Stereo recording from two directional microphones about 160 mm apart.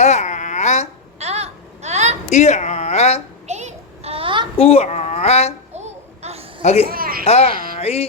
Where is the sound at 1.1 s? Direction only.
40° right (ahead or behind).